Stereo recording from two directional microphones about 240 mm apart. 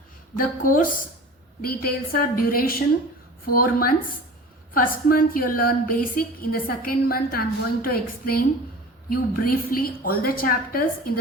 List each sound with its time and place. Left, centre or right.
0.3 s a woman's voice: left